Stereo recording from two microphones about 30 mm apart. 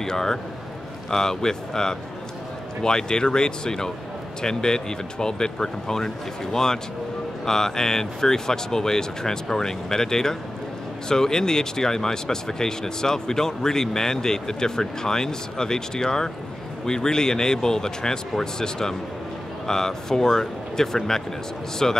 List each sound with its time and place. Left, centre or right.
0.0 s speech: centre